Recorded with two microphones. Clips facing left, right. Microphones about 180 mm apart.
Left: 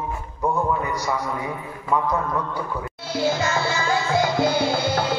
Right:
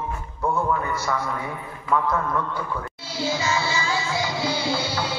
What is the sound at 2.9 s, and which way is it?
Music, 55° left (ahead or behind).